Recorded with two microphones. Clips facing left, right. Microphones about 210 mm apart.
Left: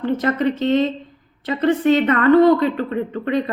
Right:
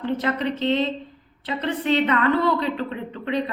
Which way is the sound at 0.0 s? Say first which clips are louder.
Left 5 dB; 45° left (ahead or behind).